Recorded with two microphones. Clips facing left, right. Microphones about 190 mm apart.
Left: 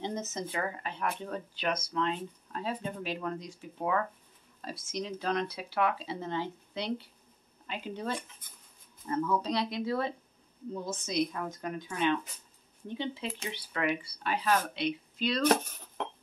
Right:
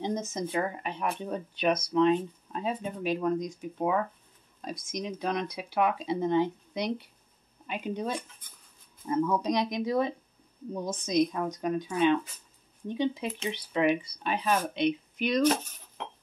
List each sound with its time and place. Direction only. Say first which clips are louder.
0.0 s speech: right 4 dB; 15° right (ahead or behind)